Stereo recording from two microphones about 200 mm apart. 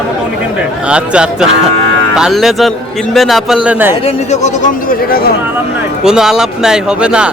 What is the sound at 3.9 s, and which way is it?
Speech, 30° left (ahead or behind).